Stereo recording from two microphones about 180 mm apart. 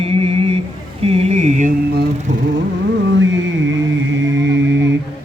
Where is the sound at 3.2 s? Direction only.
90° right.